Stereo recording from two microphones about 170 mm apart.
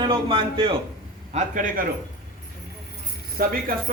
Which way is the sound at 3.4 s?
55° right (ahead or behind).